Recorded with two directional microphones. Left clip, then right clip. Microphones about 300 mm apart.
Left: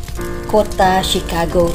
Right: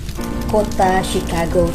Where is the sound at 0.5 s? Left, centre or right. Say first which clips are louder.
Left 3 dB; centre.